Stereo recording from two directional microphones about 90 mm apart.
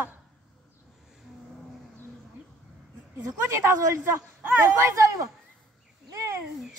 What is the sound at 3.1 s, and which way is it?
Speech, 30° right (ahead or behind).